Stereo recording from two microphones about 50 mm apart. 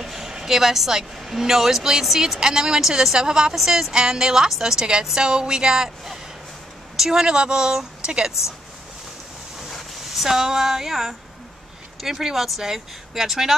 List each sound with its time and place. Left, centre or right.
0.0 s a woman's voice: centre
9.6 s a woman's voice: centre